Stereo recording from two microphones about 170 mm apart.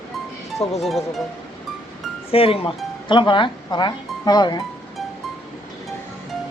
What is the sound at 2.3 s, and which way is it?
Speech, 35° left (ahead or behind).